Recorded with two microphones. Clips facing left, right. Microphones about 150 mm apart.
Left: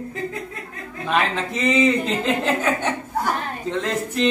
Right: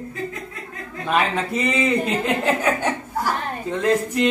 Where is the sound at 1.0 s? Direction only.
5° right (ahead or behind).